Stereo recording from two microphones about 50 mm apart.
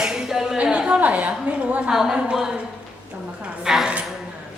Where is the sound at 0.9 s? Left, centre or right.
Right.